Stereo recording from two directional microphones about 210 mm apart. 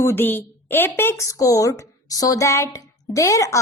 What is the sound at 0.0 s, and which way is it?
A woman's voice, 10° left (ahead or behind).